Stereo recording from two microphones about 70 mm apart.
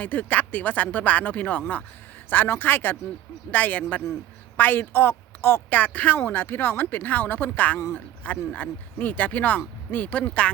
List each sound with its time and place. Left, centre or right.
0.0 s speech: left